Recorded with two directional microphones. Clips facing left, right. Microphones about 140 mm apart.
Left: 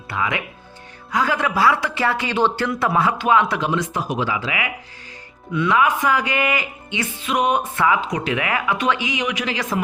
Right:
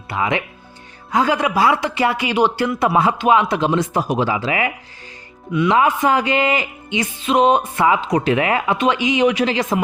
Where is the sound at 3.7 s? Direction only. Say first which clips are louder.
Right 4 dB; 40° right (ahead or behind).